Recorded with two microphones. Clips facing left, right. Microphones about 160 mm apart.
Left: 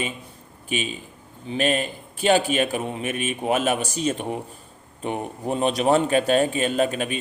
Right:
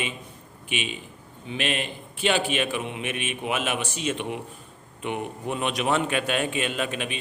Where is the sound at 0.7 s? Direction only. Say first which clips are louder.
Left 4 dB; 40° left (ahead or behind).